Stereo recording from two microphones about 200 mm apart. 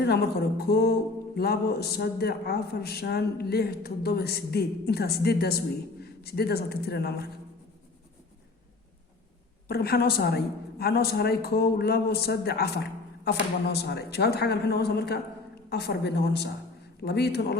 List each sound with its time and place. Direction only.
0.0 s a man's voice: 55° left (ahead or behind)
9.6 s a man's voice: 50° left (ahead or behind)